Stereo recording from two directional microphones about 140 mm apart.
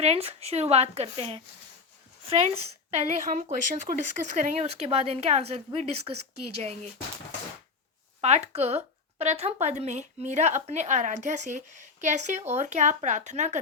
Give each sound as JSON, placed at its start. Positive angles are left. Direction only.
{"t": 0.0, "sound": "a woman's voice", "side_deg": -45}
{"t": 3.9, "sound": "speech", "side_deg": -25}
{"t": 4.4, "sound": "a woman's voice", "side_deg": -55}
{"t": 8.2, "sound": "speech", "side_deg": -50}